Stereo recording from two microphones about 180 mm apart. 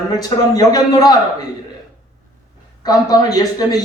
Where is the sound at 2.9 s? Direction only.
20° left (ahead or behind).